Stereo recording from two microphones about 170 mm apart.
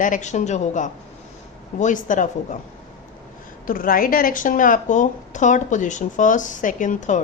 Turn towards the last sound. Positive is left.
turn(degrees=45)  # may be behind; listen again after turning